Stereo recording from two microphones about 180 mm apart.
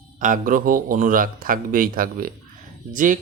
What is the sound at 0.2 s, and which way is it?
Speech, 50° right (ahead or behind).